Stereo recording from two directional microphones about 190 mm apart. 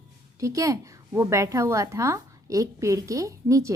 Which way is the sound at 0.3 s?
15° right (ahead or behind).